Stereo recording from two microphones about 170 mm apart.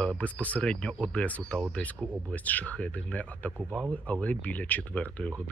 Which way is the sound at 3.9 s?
10° left (ahead or behind).